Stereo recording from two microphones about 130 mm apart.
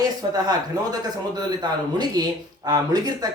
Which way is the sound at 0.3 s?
30° right (ahead or behind).